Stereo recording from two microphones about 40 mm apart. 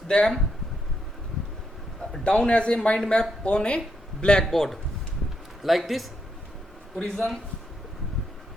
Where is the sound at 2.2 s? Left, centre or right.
Left.